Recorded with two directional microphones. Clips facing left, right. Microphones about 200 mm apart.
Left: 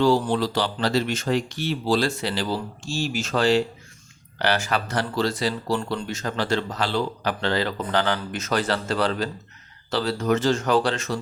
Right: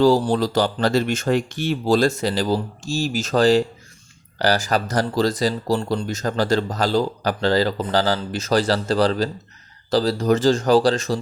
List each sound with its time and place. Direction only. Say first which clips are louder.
0.0 s speech: right 4 dB; 35° right (ahead or behind)